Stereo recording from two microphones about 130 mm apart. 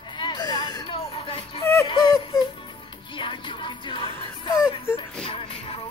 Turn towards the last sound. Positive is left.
turn(degrees=45)  # may be behind; listen again after turning